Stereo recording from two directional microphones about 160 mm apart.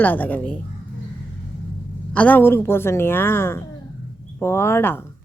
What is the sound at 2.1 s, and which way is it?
A woman's voice, 10° left (ahead or behind).